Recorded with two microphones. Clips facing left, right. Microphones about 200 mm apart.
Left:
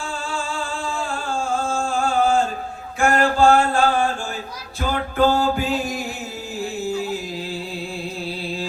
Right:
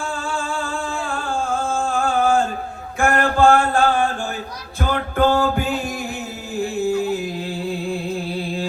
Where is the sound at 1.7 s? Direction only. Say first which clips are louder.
Right 1 dB; 55° right (ahead or behind).